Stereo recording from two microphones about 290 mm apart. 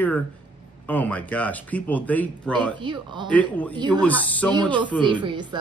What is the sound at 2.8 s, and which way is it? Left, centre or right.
Speech, centre.